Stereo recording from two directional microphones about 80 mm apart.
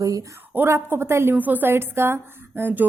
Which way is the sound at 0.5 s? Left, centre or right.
Right.